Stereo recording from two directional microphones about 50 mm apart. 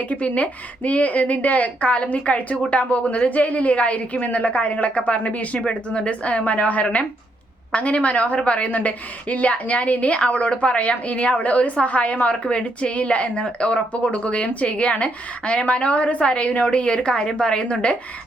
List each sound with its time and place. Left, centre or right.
0.1 s a woman's voice: left